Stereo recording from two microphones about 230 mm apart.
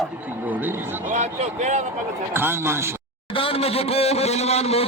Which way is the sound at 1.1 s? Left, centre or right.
Right.